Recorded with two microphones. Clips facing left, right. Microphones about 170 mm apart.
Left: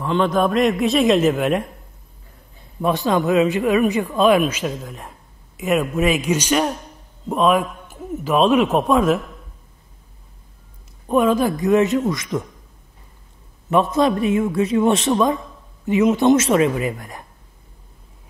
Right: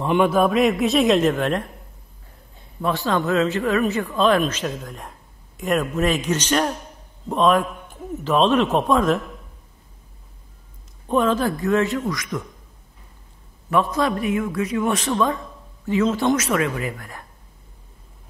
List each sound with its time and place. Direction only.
0.0 s a man's voice: 10° right (ahead or behind); by 1.7 s 10° left (ahead or behind)
2.8 s speech: 15° left (ahead or behind)
11.1 s a man's voice: 10° left (ahead or behind)
13.7 s a man's voice: 20° left (ahead or behind)